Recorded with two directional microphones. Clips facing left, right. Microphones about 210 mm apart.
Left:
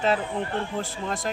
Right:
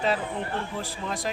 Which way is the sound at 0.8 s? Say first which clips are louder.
Left 2 dB; centre (ahead or behind).